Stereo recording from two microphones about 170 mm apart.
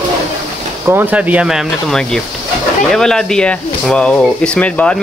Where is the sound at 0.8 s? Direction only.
10° right (ahead or behind).